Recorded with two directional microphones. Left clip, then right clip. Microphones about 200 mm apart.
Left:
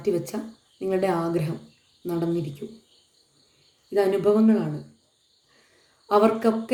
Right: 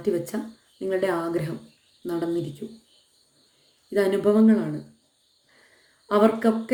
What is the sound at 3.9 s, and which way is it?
Speech, 10° right (ahead or behind).